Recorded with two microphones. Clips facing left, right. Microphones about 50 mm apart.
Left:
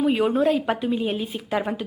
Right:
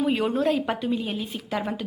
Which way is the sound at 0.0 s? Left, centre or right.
Centre.